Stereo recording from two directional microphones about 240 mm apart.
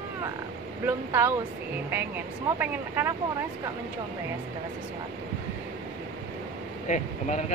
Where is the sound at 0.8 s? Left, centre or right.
Centre.